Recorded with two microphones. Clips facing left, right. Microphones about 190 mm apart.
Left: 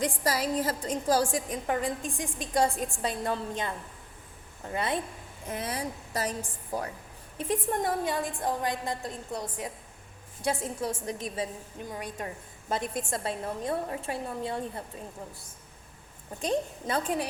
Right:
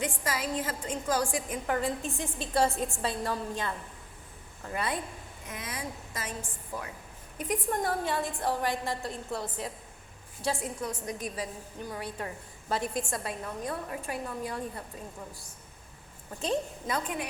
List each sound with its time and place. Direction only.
0.0 s a woman's voice: 35° left (ahead or behind)
16.8 s a woman's voice: 30° left (ahead or behind)